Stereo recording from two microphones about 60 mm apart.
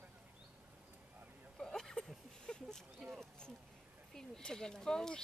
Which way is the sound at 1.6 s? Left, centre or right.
Centre.